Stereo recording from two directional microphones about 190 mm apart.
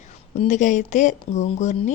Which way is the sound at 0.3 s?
40° left (ahead or behind).